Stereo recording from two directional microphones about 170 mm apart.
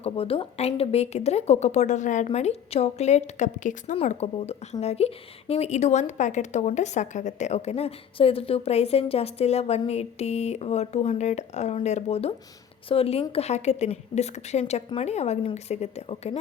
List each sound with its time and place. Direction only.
0.0 s a woman's voice: 35° left (ahead or behind)